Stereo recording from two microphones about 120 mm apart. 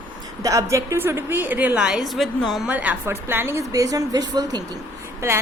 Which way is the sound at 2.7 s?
15° right (ahead or behind).